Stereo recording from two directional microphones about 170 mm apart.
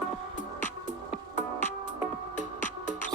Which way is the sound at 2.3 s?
45° left (ahead or behind).